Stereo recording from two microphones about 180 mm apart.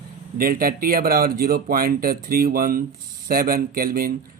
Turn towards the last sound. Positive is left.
turn(degrees=-55)  # may be behind; listen again after turning